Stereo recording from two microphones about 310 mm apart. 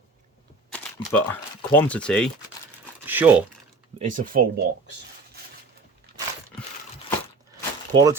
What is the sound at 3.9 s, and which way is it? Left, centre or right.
Speech, right.